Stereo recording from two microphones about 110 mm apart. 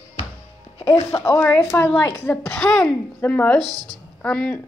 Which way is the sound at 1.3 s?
15° left (ahead or behind).